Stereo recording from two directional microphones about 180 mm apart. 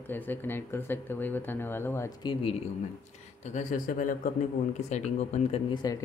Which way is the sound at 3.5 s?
45° left (ahead or behind).